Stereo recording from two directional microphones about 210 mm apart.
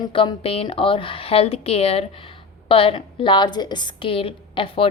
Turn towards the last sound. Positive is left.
turn(degrees=25)  # may be behind; listen again after turning